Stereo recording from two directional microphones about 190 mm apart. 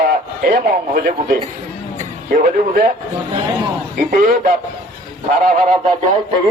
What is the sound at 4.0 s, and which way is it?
Speech, 45° right (ahead or behind).